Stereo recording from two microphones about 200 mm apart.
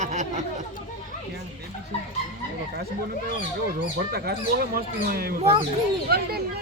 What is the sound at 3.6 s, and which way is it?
Speech, 50° right (ahead or behind).